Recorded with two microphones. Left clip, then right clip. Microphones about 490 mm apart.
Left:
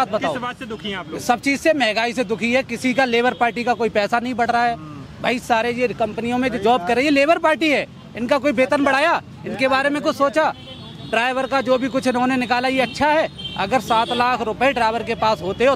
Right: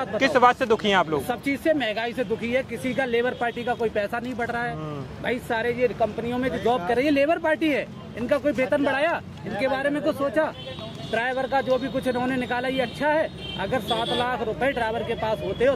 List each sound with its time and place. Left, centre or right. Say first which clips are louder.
0.2 s speech: right 6 dB; right
1.2 s a man's voice: left 7 dB; left